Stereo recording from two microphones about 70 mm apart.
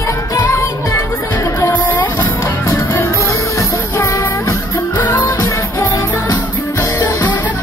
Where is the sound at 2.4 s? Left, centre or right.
Left.